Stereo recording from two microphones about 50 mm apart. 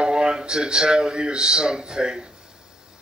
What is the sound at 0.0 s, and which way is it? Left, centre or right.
Speech, centre.